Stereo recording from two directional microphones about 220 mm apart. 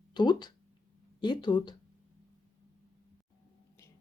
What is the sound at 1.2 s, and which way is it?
Speech, 20° left (ahead or behind).